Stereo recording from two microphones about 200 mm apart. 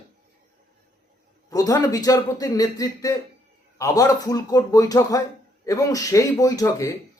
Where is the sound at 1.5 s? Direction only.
15° left (ahead or behind).